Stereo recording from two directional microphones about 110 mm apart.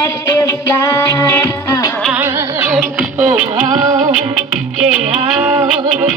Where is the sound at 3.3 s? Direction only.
90° right.